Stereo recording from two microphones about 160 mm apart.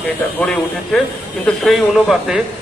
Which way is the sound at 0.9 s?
Centre (ahead or behind).